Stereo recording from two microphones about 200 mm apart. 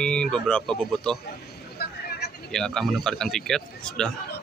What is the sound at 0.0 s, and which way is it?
A man's voice, 5° left (ahead or behind).